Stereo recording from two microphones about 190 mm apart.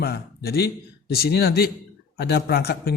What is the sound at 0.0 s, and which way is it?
Speech, 55° left (ahead or behind).